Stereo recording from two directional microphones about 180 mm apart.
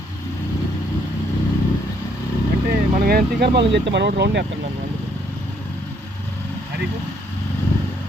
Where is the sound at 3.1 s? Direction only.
60° right (ahead or behind).